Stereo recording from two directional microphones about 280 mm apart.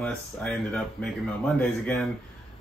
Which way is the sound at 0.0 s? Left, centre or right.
Centre.